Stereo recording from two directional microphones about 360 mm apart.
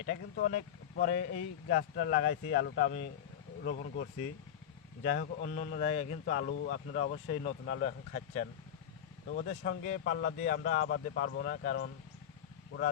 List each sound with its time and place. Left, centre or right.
0.1 s speech: left
5.1 s speech: left